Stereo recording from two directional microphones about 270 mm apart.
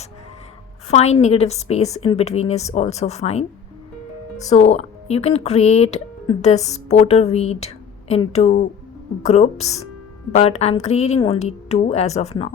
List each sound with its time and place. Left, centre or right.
0.9 s speech: left